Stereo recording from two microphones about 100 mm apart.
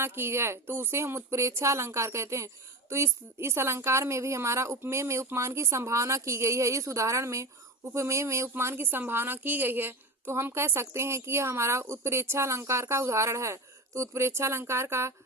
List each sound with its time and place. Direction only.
0.0 s a woman's voice: 25° right (ahead or behind)